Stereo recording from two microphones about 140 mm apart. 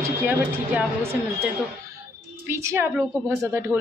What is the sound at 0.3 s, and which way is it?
Speech, 10° right (ahead or behind).